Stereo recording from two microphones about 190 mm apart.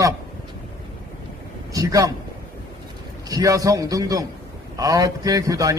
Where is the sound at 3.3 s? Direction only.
20° right (ahead or behind).